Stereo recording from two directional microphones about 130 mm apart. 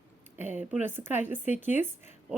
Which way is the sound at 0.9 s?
15° right (ahead or behind).